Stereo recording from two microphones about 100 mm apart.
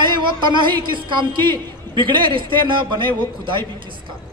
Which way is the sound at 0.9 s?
50° right (ahead or behind).